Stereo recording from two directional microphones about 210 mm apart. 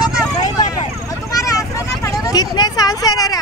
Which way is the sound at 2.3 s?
20° left (ahead or behind).